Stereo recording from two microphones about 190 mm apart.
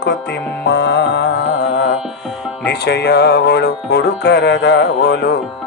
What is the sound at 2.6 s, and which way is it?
Music, 60° left (ahead or behind).